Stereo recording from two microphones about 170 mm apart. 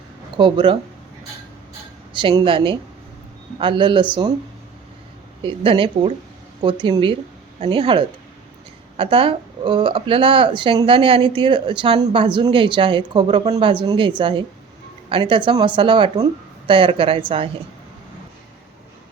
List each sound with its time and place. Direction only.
0.3 s speech: 30° right (ahead or behind)
2.1 s speech: 30° right (ahead or behind)
5.4 s a woman's voice: 30° right (ahead or behind)